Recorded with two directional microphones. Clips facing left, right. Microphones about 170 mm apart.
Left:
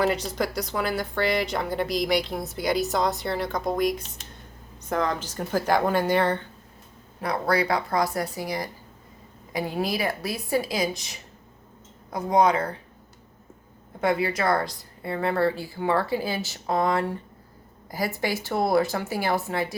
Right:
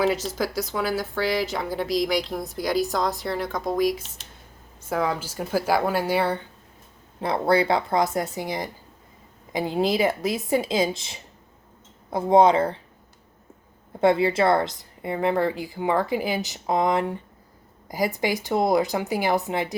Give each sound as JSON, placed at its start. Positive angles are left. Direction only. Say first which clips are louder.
{"t": 0.0, "sound": "a woman's voice", "louder": "right 1 dB", "side_deg": 0}
{"t": 7.2, "sound": "a woman's voice", "louder": "right 3 dB", "side_deg": -25}
{"t": 14.0, "sound": "a woman's voice", "louder": "right 5 dB", "side_deg": -25}